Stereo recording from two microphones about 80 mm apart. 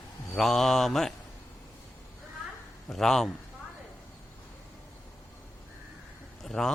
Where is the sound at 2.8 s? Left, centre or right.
Centre.